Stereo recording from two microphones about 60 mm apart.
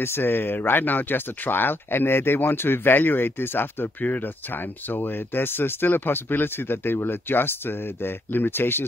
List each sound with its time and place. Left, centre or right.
0.0 s speech: left